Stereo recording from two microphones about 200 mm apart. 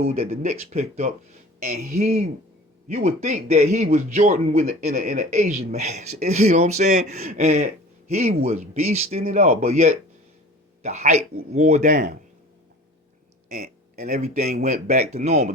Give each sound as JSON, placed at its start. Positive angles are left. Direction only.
{"t": 0.1, "sound": "speech", "side_deg": -30}
{"t": 14.0, "sound": "speech", "side_deg": -35}